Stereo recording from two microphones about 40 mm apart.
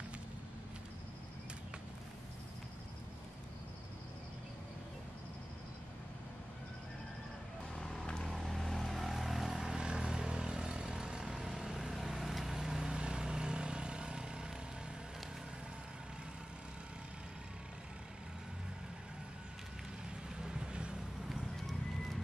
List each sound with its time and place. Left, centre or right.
8.4 s vehicle: centre
9.8 s vehicle: right
20.4 s vehicle: centre
21.3 s horse: centre